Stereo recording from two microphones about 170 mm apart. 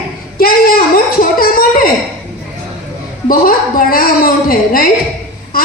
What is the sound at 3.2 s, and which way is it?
A woman's voice, 60° left (ahead or behind).